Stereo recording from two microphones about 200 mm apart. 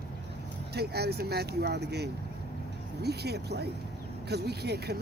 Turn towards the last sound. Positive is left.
turn(degrees=-55)  # may be behind; listen again after turning